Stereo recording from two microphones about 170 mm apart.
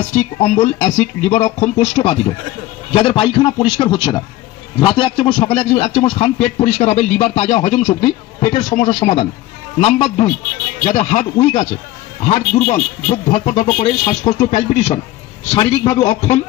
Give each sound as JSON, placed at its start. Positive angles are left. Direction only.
{"t": 0.1, "sound": "speech", "side_deg": 45}
{"t": 1.6, "sound": "a man's voice", "side_deg": 35}
{"t": 7.9, "sound": "a man's voice", "side_deg": 30}
{"t": 9.0, "sound": "speech", "side_deg": 40}
{"t": 14.4, "sound": "speech", "side_deg": 45}
{"t": 15.5, "sound": "speech", "side_deg": 35}
{"t": 15.9, "sound": "a man's voice", "side_deg": 20}